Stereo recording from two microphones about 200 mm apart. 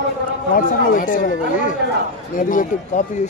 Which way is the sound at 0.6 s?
45° left (ahead or behind).